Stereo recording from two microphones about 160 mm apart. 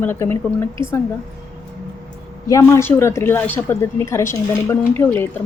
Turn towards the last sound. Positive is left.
turn(degrees=15)  # may be behind; listen again after turning